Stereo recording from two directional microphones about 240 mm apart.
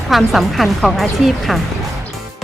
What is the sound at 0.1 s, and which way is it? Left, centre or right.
Speech, centre.